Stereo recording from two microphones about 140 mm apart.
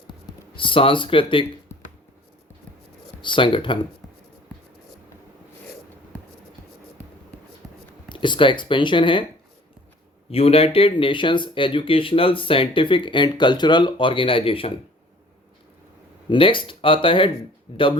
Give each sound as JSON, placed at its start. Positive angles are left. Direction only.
{"t": 0.1, "sound": "speech", "side_deg": 35}
{"t": 1.7, "sound": "a sound", "side_deg": 20}
{"t": 3.2, "sound": "speech", "side_deg": 35}
{"t": 7.6, "sound": "a sound", "side_deg": 0}
{"t": 8.1, "sound": "speech", "side_deg": 35}
{"t": 10.2, "sound": "speech", "side_deg": 45}
{"t": 16.3, "sound": "speech", "side_deg": 35}